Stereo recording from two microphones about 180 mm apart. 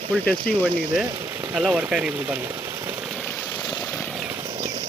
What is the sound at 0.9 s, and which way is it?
Speech, 5° right (ahead or behind).